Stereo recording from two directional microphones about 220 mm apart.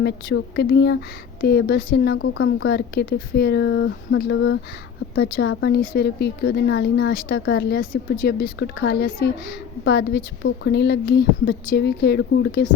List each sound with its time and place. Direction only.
0.0 s speech: 50° left (ahead or behind)